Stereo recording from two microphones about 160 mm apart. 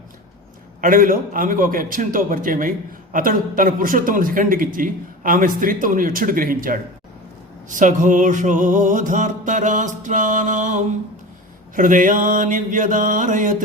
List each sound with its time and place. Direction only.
0.8 s a man's voice: 60° right (ahead or behind)
7.7 s music: 50° right (ahead or behind)
11.7 s a man's voice: 55° right (ahead or behind)